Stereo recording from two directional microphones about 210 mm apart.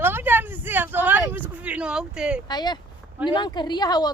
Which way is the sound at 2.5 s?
20° left (ahead or behind).